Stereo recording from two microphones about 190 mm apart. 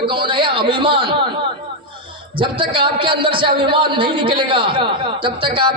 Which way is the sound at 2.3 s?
25° right (ahead or behind).